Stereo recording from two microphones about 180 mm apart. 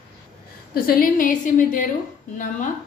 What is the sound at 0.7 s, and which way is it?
A woman's voice, 55° left (ahead or behind).